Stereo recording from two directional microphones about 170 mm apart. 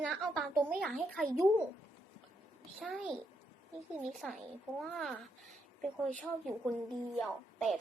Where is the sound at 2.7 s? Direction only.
5° right (ahead or behind).